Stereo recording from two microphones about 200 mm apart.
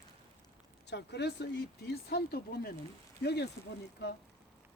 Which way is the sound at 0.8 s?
60° left (ahead or behind).